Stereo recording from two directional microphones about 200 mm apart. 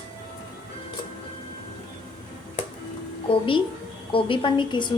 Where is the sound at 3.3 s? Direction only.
25° left (ahead or behind).